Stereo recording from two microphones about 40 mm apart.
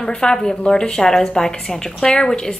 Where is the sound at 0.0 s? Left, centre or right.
Centre.